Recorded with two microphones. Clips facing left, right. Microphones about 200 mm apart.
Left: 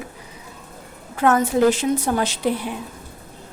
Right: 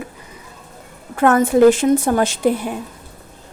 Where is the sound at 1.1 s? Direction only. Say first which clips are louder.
Right 4 dB; 55° right (ahead or behind).